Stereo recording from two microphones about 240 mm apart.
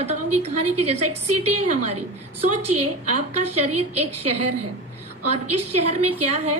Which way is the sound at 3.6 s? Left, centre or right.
Right.